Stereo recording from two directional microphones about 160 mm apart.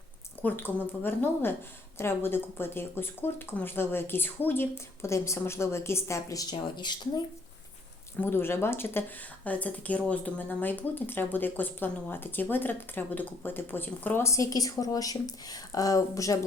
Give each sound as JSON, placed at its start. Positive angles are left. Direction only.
{"t": 0.4, "sound": "a woman's voice", "side_deg": 15}
{"t": 8.2, "sound": "a woman's voice", "side_deg": 15}